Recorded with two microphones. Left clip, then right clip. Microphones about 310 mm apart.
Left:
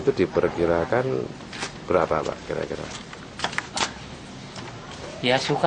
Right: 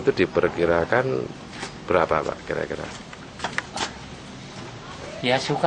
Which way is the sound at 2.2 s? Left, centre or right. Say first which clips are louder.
Right 1 dB; centre.